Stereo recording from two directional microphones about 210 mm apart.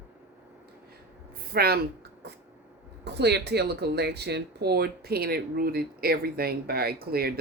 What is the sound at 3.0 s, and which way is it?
Speech, 50° right (ahead or behind).